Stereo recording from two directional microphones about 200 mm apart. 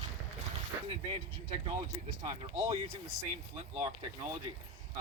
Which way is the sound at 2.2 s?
20° right (ahead or behind).